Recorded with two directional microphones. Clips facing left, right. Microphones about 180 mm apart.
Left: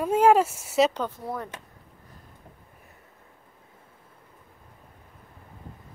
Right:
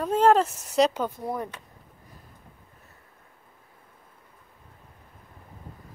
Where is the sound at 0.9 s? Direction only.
10° right (ahead or behind).